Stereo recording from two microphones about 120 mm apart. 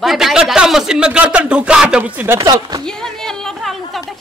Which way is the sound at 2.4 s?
30° right (ahead or behind).